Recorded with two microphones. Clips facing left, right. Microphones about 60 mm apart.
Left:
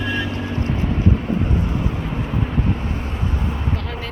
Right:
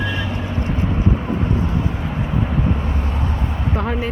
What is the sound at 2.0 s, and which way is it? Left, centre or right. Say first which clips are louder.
Vehicle: right 1 dB; centre.